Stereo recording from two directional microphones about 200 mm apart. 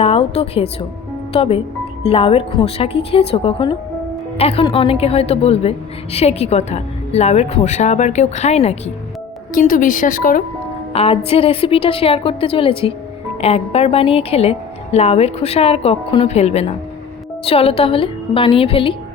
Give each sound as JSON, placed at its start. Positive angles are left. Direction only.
{"t": 0.0, "sound": "a woman's voice", "side_deg": 30}
{"t": 9.6, "sound": "a woman's voice", "side_deg": 45}
{"t": 10.9, "sound": "a woman's voice", "side_deg": 30}